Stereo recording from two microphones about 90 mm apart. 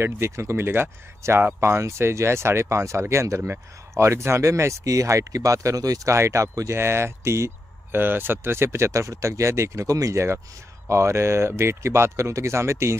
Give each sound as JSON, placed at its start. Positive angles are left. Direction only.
{"t": 0.0, "sound": "speech", "side_deg": -30}